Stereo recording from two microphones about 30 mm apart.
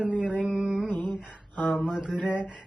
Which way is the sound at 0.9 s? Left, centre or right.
Left.